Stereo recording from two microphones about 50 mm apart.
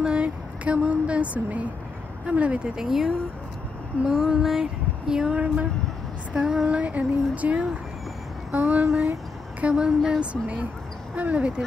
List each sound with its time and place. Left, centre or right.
0.0 s speech: right
2.7 s speech: centre
4.1 s female singing: centre
5.3 s speech: right
6.3 s speech: centre
6.8 s speech: right
9.6 s speech: right
10.3 s speech: right